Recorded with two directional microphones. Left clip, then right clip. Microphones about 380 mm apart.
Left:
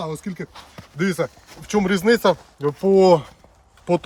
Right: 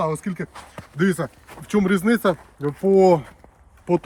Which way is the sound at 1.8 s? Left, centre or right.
Left.